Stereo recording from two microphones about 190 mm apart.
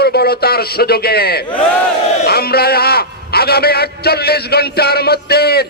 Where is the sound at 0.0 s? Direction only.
55° left (ahead or behind).